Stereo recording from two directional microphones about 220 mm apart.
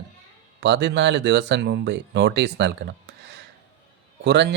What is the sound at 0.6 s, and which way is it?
Speech, 50° right (ahead or behind).